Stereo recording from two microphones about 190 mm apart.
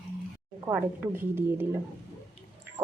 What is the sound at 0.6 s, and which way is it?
Speech, 15° right (ahead or behind).